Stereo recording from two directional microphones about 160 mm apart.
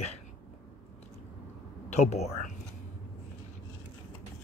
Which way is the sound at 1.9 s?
45° left (ahead or behind).